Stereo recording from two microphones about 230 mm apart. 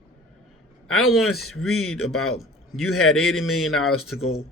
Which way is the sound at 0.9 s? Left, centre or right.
Left.